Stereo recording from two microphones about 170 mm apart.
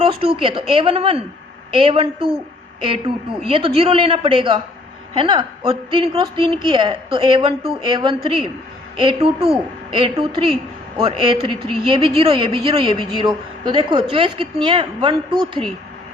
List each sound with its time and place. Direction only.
0.0 s speech: 35° right (ahead or behind)
3.4 s a woman's voice: 35° right (ahead or behind)
15.6 s speech: 10° left (ahead or behind)